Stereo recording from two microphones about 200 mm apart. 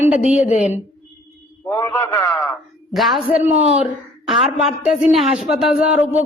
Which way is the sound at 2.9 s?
Centre (ahead or behind).